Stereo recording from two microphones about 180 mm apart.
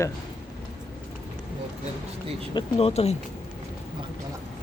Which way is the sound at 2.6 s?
35° left (ahead or behind).